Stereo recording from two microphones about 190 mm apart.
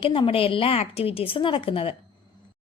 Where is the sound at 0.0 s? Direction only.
30° left (ahead or behind).